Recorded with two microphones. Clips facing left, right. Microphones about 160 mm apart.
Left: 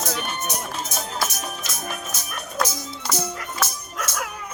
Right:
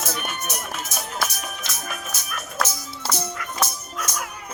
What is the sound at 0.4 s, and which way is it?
Music, 30° left (ahead or behind).